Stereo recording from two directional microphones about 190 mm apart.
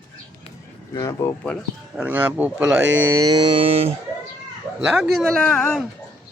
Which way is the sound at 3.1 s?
20° right (ahead or behind).